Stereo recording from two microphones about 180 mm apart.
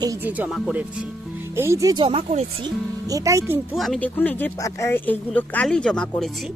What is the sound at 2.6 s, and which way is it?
Speech, 20° right (ahead or behind).